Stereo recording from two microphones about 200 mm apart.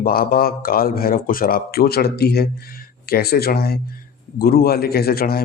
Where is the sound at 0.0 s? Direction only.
50° left (ahead or behind).